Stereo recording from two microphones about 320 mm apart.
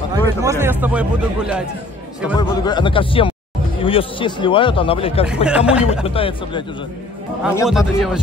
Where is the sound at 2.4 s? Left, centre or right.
Centre.